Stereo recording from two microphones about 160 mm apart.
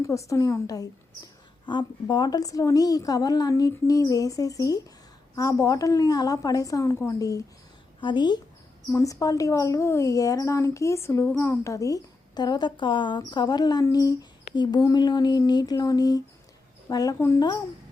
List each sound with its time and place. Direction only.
0.0 s speech: 20° left (ahead or behind)